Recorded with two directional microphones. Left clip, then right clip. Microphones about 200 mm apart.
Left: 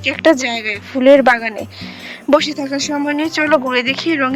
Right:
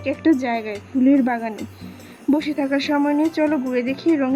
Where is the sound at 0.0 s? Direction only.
50° left (ahead or behind).